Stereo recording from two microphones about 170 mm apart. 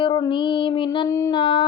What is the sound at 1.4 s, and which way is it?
Speech, 25° left (ahead or behind).